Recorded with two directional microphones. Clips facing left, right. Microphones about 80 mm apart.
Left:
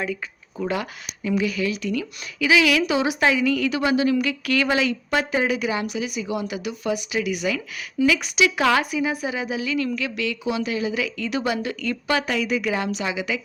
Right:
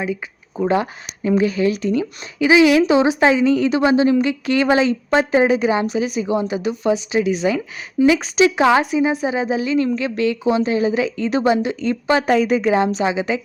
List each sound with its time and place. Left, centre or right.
0.5 s speech: right